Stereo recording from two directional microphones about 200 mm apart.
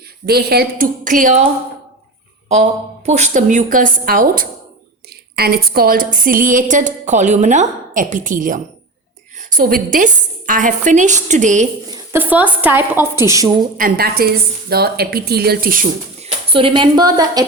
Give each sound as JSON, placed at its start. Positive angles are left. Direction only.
{"t": 0.3, "sound": "a woman's voice", "side_deg": -50}
{"t": 3.1, "sound": "a woman's voice", "side_deg": -35}
{"t": 11.9, "sound": "a woman's voice", "side_deg": -15}
{"t": 13.7, "sound": "a woman's voice", "side_deg": -45}
{"t": 16.2, "sound": "speech", "side_deg": -25}